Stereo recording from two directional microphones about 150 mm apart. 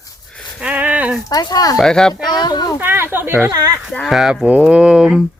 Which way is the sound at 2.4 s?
25° left (ahead or behind).